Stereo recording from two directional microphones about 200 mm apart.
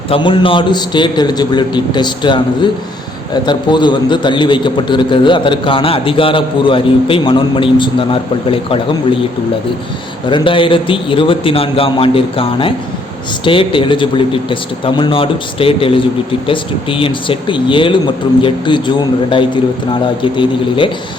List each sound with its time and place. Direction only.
0.1 s a man's voice: 25° left (ahead or behind)
10.2 s a man's voice: 25° left (ahead or behind)